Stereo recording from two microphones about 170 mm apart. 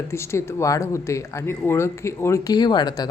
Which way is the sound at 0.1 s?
15° left (ahead or behind).